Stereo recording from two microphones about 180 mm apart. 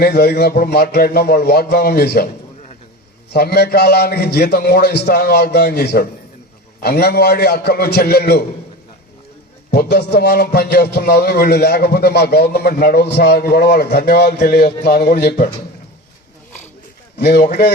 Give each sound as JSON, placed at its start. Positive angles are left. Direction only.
{"t": 0.0, "sound": "a man's voice", "side_deg": 65}
{"t": 3.3, "sound": "a man's voice", "side_deg": 65}
{"t": 9.7, "sound": "a man's voice", "side_deg": 65}
{"t": 17.2, "sound": "a man's voice", "side_deg": 65}